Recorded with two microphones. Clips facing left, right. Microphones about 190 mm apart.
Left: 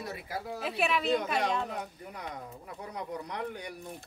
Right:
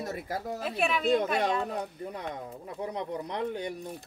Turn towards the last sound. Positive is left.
turn(degrees=-25)  # may be behind; listen again after turning